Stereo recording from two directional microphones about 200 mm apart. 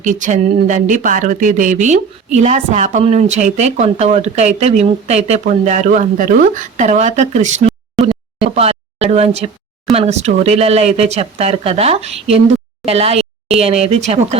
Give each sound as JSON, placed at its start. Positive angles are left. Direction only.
{"t": 0.0, "sound": "speech", "side_deg": -40}